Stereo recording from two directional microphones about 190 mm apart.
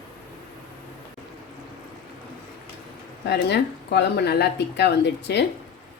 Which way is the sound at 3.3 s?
65° left (ahead or behind).